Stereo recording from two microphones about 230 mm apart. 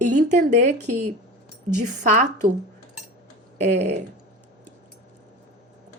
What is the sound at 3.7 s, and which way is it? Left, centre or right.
Speech, right.